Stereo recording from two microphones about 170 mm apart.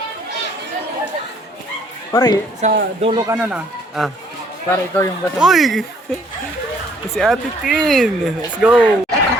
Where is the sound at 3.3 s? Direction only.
10° right (ahead or behind).